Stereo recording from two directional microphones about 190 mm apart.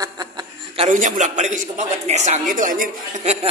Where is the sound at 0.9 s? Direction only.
40° right (ahead or behind).